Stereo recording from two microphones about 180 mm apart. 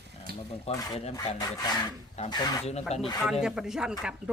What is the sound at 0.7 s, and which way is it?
Speech, 20° left (ahead or behind).